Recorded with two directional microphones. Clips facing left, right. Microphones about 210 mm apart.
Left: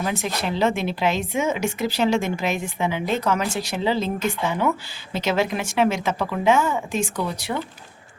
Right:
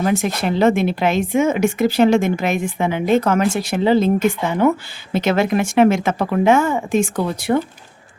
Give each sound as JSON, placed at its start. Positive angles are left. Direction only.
{"t": 0.0, "sound": "speech", "side_deg": -50}
{"t": 5.1, "sound": "speech", "side_deg": -55}